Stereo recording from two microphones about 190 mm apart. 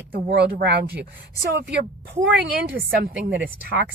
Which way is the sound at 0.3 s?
60° right (ahead or behind).